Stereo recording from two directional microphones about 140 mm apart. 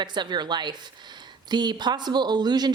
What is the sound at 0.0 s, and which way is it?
Speech, 30° right (ahead or behind).